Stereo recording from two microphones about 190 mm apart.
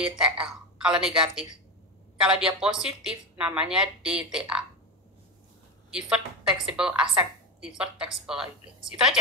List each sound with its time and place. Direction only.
0.2 s a woman's voice: 5° right (ahead or behind)
5.9 s a woman's voice: 5° right (ahead or behind)